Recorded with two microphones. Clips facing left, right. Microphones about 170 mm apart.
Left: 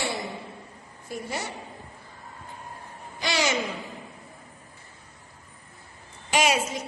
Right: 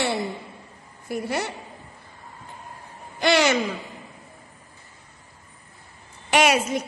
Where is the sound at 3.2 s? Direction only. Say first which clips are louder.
Right 7 dB; 60° right (ahead or behind).